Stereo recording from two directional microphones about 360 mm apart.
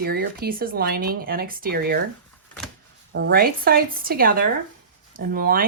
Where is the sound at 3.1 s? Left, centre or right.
Right.